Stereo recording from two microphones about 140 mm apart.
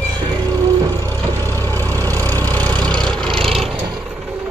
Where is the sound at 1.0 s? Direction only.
15° left (ahead or behind).